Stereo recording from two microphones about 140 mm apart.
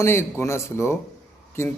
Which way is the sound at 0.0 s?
20° left (ahead or behind).